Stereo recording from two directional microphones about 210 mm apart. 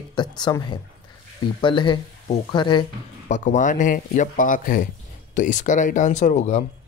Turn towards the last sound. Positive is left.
turn(degrees=35)  # may be behind; listen again after turning